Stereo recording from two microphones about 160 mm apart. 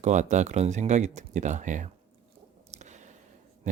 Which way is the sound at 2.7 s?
45° right (ahead or behind).